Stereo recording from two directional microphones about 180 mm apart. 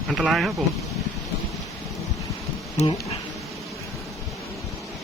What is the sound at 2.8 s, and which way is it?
Speech, 35° left (ahead or behind).